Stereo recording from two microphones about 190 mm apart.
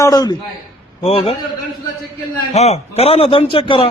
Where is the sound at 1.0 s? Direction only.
30° left (ahead or behind).